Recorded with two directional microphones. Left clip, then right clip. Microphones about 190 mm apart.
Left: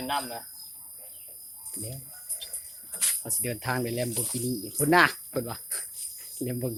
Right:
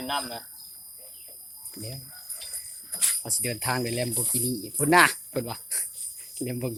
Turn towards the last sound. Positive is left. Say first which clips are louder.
# even
turn(degrees=-5)  # may be behind; listen again after turning